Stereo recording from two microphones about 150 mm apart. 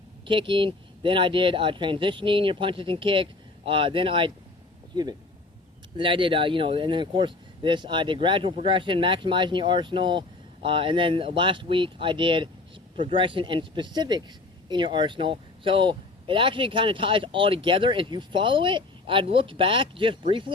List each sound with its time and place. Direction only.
0.3 s speech: 35° right (ahead or behind)
6.0 s speech: 35° right (ahead or behind)